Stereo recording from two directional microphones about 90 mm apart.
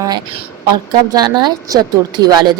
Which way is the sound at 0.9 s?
50° right (ahead or behind).